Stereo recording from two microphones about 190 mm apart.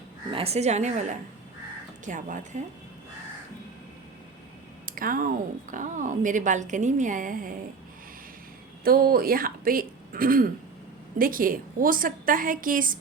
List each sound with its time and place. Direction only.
0.3 s a woman's voice: 30° right (ahead or behind)
2.0 s a woman's voice: 40° right (ahead or behind)
4.9 s a woman's voice: 45° right (ahead or behind)
8.8 s a woman's voice: 50° right (ahead or behind)